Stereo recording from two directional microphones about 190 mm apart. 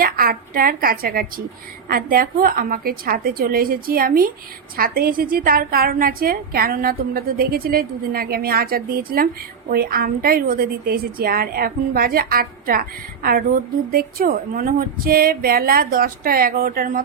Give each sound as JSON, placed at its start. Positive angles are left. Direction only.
{"t": 0.0, "sound": "a woman's voice", "side_deg": -50}